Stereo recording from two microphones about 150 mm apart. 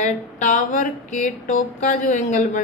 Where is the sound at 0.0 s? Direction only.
60° left (ahead or behind).